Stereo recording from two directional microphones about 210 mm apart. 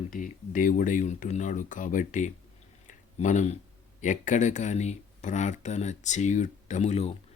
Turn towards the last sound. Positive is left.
turn(degrees=30)  # may be behind; listen again after turning